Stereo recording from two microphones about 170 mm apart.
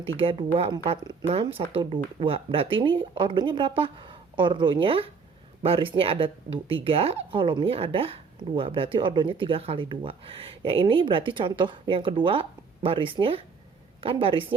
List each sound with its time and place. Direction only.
0.2 s speech: 30° right (ahead or behind)